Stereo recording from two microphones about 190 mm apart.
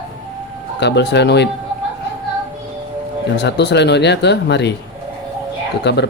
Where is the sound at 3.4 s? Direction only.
65° left (ahead or behind).